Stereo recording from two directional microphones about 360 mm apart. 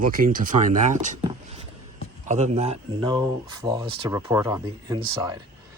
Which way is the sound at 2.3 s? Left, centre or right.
Centre.